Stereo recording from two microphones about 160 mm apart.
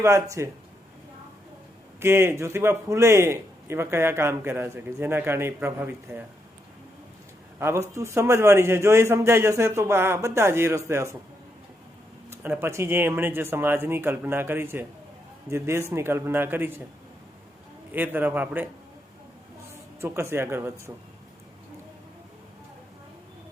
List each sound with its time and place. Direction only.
0.0 s a man's voice: 20° right (ahead or behind)
2.0 s a man's voice: 15° right (ahead or behind)
7.6 s a man's voice: 15° right (ahead or behind)
12.3 s a man's voice: 15° right (ahead or behind)
17.9 s a man's voice: 10° right (ahead or behind)
19.7 s speech: 15° right (ahead or behind)